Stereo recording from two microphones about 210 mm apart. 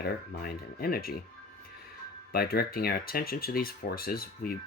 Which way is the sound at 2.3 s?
45° left (ahead or behind).